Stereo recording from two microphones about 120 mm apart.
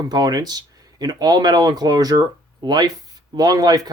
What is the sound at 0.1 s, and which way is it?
Speech, 35° right (ahead or behind).